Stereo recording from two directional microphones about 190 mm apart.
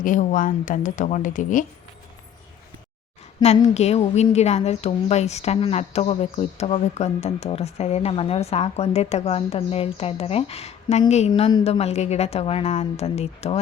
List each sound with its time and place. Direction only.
0.0 s speech: 45° left (ahead or behind)
3.4 s a woman's voice: 35° left (ahead or behind)